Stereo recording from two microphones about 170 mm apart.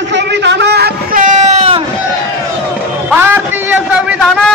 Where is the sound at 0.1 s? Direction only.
90° right; by 1.9 s 35° right (ahead or behind).